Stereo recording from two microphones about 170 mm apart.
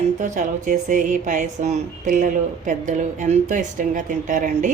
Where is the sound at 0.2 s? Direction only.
45° right (ahead or behind).